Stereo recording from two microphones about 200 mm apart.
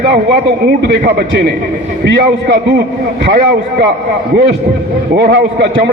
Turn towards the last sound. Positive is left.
turn(degrees=-55)  # may be behind; listen again after turning